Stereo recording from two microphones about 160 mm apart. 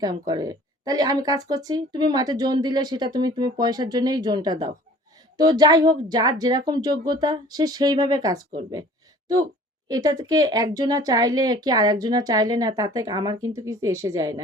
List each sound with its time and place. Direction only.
0.0 s speech: 25° right (ahead or behind)